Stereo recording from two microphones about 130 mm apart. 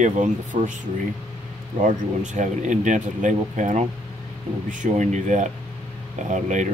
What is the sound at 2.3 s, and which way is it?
Speech, 75° right (ahead or behind).